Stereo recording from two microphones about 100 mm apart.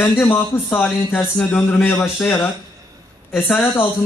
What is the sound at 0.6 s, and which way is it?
Speech, 5° left (ahead or behind).